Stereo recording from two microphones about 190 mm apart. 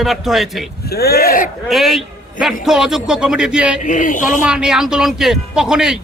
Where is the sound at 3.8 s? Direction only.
45° left (ahead or behind).